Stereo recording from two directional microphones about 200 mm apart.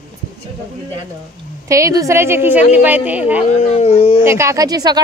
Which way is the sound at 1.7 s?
15° right (ahead or behind).